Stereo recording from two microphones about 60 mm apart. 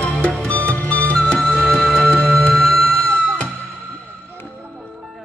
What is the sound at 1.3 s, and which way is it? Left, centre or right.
Music, centre.